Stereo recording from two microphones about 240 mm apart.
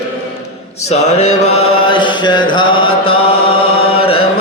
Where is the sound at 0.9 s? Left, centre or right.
Left.